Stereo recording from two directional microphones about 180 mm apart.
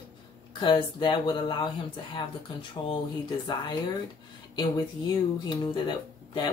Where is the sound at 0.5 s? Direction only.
25° left (ahead or behind).